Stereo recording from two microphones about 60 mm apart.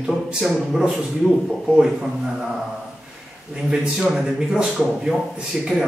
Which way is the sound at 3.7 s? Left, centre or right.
Centre.